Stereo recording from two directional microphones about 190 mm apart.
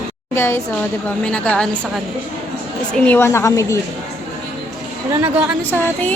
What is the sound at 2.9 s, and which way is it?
Speech, 10° left (ahead or behind).